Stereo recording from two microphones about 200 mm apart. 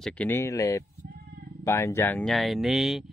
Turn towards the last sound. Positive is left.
turn(degrees=0)  # may be behind; listen again after turning